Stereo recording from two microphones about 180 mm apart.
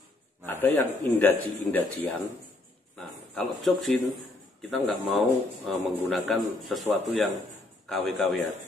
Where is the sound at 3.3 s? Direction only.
Centre (ahead or behind).